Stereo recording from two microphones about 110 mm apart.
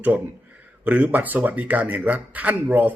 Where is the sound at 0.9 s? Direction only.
15° right (ahead or behind).